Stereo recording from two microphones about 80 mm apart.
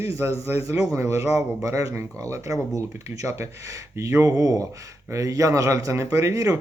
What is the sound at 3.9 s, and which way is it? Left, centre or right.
A man's voice, right.